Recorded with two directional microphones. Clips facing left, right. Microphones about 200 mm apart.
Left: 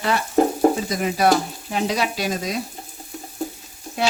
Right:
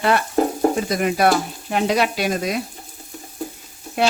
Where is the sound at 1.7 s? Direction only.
60° right (ahead or behind).